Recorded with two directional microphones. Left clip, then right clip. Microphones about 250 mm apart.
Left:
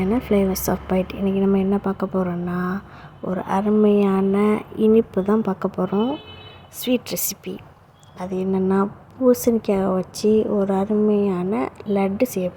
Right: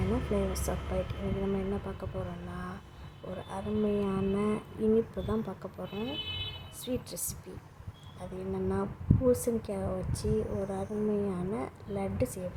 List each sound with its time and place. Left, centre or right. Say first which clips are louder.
0.5 s a woman's voice: left 12 dB; left